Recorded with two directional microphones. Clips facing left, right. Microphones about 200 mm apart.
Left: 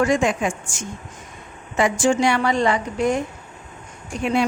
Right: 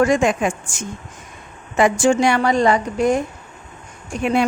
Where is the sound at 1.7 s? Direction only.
55° right (ahead or behind).